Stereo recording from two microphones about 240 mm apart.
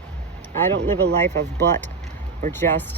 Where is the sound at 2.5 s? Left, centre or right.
Centre.